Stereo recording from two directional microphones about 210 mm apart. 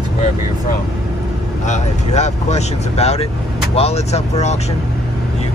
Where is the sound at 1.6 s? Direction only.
35° left (ahead or behind).